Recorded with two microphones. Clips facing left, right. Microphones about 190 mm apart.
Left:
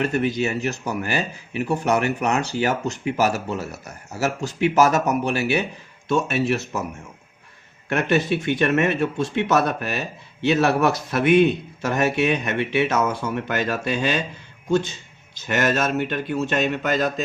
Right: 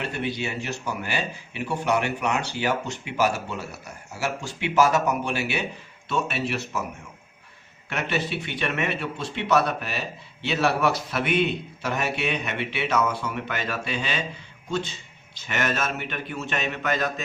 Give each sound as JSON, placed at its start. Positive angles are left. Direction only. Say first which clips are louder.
{"t": 0.0, "sound": "speech", "louder": "left 7 dB", "side_deg": 45}
{"t": 7.9, "sound": "speech", "louder": "left 7 dB", "side_deg": 45}
{"t": 15.4, "sound": "speech", "louder": "left 6 dB", "side_deg": 45}